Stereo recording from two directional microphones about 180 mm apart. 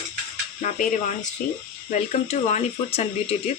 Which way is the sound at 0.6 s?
45° left (ahead or behind).